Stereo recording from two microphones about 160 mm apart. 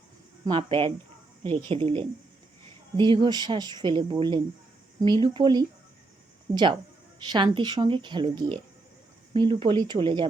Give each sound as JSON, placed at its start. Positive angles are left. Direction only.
{"t": 0.4, "sound": "speech", "side_deg": -35}